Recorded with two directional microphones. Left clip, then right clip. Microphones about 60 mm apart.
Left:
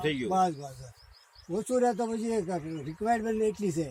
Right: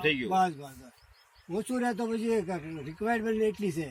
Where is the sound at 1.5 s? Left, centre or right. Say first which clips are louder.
Left 4 dB; left.